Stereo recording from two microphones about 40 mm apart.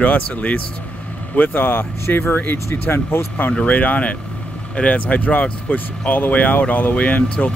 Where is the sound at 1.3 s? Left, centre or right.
Left.